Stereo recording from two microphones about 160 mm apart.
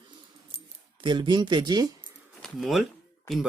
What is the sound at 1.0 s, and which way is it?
Speech, 30° right (ahead or behind).